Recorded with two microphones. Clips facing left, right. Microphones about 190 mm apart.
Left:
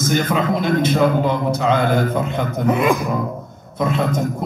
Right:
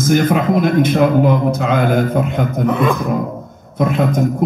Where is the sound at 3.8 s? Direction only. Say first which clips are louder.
Right 4 dB; 50° right (ahead or behind).